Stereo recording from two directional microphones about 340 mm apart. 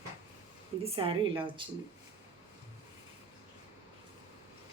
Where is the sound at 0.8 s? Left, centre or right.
Centre.